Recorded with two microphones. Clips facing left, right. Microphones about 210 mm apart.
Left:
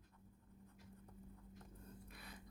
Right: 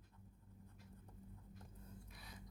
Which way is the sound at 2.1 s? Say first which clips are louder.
Left 2 dB; 60° left (ahead or behind).